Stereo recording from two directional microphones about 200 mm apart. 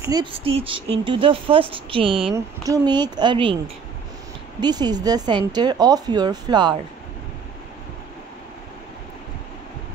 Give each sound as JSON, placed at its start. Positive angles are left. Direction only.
{"t": 0.0, "sound": "speech", "side_deg": -20}